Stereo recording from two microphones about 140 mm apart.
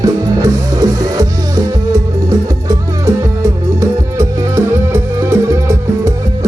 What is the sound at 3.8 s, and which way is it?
Music, 20° right (ahead or behind).